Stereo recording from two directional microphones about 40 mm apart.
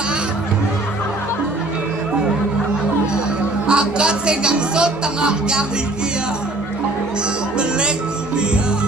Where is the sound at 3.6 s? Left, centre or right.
Right.